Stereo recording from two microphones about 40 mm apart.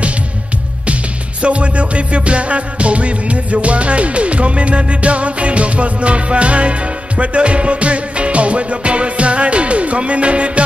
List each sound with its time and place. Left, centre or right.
1.4 s music: right